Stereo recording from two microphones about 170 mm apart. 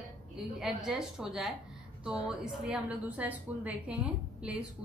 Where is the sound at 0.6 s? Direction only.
5° right (ahead or behind).